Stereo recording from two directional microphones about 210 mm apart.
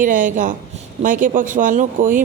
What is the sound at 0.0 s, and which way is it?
A woman's voice, 40° right (ahead or behind).